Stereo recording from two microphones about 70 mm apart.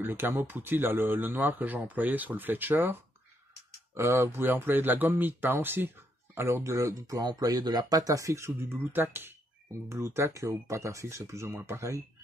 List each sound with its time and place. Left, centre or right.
0.0 s speech: right